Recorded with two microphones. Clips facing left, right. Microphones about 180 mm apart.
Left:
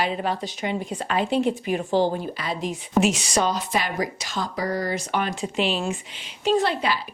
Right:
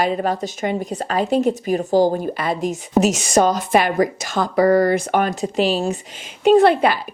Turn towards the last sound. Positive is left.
turn(degrees=-55)  # may be behind; listen again after turning